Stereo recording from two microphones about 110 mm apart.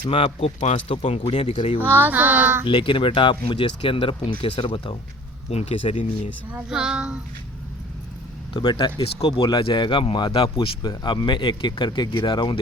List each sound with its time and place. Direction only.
0.1 s speech: 60° left (ahead or behind)
1.8 s child singing: 20° right (ahead or behind)
2.6 s speech: 50° left (ahead or behind)
5.5 s speech: 75° left (ahead or behind)
6.5 s child singing: 5° right (ahead or behind)
8.5 s speech: 45° left (ahead or behind)
10.8 s speech: 40° left (ahead or behind)